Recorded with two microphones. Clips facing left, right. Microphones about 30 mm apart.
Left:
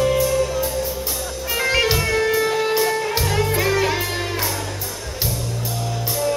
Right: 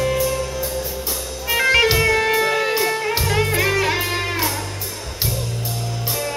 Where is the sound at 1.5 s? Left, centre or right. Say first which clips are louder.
Right 4 dB; centre.